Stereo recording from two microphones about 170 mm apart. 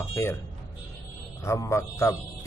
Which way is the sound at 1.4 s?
15° left (ahead or behind).